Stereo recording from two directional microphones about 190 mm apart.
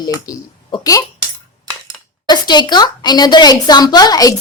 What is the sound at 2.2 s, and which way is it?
A woman's voice, 20° left (ahead or behind).